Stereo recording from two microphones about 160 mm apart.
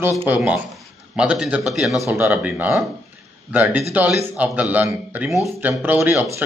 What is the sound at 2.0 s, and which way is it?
Speech, 15° right (ahead or behind).